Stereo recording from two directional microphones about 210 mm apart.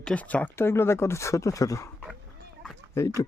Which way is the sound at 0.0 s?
5° left (ahead or behind).